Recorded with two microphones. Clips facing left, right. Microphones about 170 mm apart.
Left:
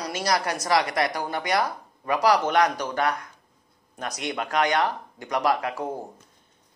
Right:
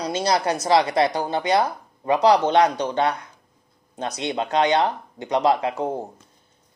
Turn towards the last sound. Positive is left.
turn(degrees=-25)  # may be behind; listen again after turning